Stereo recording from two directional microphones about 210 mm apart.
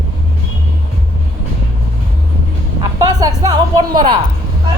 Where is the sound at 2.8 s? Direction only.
15° right (ahead or behind).